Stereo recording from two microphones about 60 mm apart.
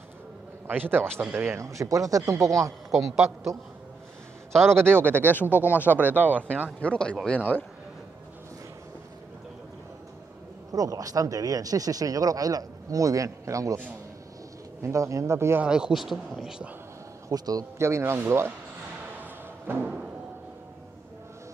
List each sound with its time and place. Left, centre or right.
0.7 s speech: right
1.6 s speech: right
4.6 s speech: right
5.3 s speech: left
6.2 s speech: right
6.8 s speech: centre
10.7 s speech: right
14.8 s speech: right
15.3 s speech: right
15.6 s speech: centre
16.0 s speech: centre
17.3 s a man's voice: right
17.7 s speech: right
19.6 s music: right